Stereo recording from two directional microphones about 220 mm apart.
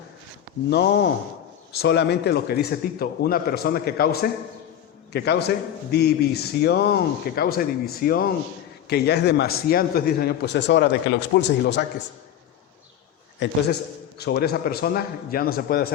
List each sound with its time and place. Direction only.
0.7 s a man's voice: 50° left (ahead or behind)
13.4 s a man's voice: 55° left (ahead or behind)